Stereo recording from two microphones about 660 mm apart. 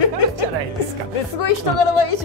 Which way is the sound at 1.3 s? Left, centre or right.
Left.